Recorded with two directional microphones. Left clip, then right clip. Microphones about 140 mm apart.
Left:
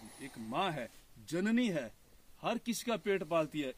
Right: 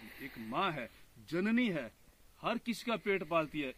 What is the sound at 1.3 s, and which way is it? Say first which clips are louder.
Speech: even; 20° left (ahead or behind).